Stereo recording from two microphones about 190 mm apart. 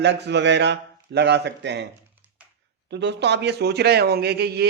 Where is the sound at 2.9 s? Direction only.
65° right (ahead or behind).